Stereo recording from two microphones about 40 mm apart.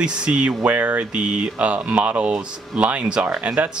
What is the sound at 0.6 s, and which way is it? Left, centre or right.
Speech, right.